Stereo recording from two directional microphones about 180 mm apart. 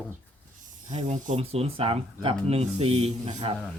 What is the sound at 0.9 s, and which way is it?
Speech, 40° right (ahead or behind).